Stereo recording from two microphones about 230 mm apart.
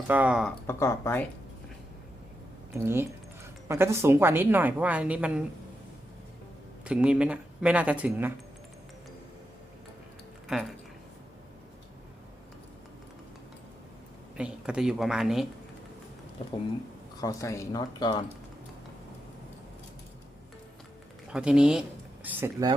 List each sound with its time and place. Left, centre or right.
0.1 s speech: centre
0.7 s speech: centre
2.7 s a woman's voice: centre
6.8 s speech: centre
14.3 s speech: centre
17.2 s speech: centre
21.2 s speech: centre